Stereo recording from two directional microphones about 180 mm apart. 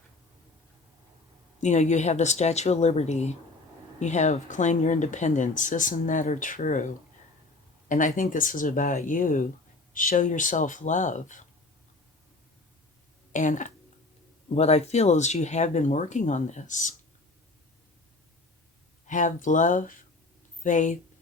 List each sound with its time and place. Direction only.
1.6 s speech: 40° left (ahead or behind)
13.3 s speech: 45° left (ahead or behind)
19.0 s speech: 45° left (ahead or behind)